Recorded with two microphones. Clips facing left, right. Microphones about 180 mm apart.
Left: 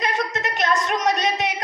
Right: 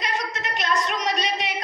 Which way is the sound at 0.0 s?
50° left (ahead or behind).